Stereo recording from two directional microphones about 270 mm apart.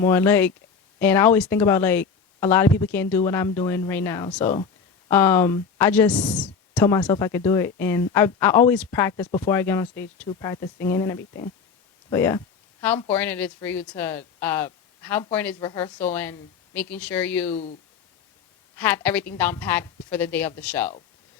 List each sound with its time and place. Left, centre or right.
0.0 s speech: centre
17.5 s speech: left
18.8 s speech: centre